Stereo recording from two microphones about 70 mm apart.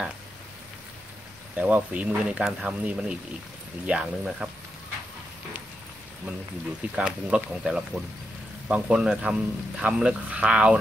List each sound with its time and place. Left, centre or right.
1.5 s a man's voice: right
6.8 s a man's voice: centre